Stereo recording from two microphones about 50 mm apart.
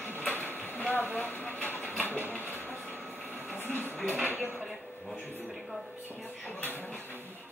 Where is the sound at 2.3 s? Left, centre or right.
Left.